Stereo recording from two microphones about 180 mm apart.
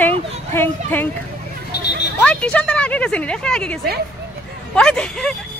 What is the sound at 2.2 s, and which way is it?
A woman's voice, 5° left (ahead or behind).